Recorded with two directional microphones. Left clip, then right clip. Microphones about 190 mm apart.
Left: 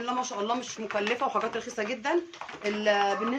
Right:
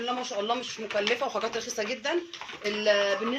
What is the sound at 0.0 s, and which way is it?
Speech, 50° left (ahead or behind).